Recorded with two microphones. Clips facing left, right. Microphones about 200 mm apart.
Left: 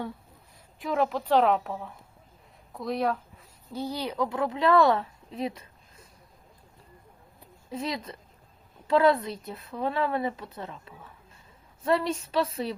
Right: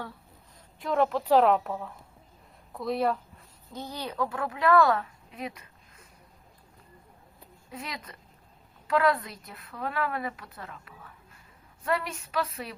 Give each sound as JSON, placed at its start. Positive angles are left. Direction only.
{"t": 0.8, "sound": "a woman's voice", "side_deg": 0}
{"t": 3.7, "sound": "a woman's voice", "side_deg": 10}
{"t": 7.7, "sound": "a woman's voice", "side_deg": 25}